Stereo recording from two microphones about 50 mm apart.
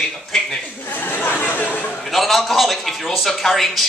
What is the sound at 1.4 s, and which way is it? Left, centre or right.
Speech, left.